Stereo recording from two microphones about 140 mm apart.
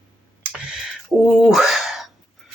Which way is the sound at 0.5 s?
5° right (ahead or behind).